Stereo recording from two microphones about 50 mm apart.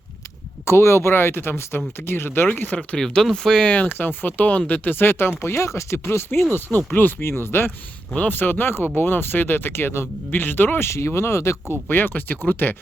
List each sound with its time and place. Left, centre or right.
0.6 s speech: left
2.7 s speech: centre
3.7 s speech: left
3.9 s speech: left
5.4 s speech: left
6.1 s speech: left
7.3 s speech: left
8.3 s speech: left
10.8 s speech: left
11.7 s speech: left